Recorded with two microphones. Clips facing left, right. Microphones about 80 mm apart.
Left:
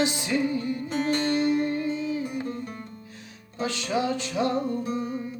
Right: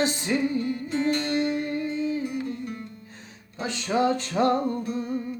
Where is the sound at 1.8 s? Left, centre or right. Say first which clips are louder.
Right 1 dB; right.